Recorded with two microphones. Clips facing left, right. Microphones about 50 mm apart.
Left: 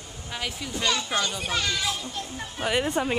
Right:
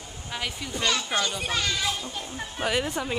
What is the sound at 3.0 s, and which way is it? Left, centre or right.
Speech, centre.